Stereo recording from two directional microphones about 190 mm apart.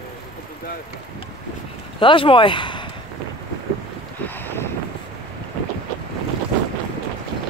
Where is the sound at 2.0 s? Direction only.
25° left (ahead or behind).